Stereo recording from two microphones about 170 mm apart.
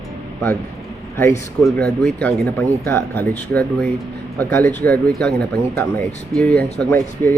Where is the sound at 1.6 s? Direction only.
5° left (ahead or behind).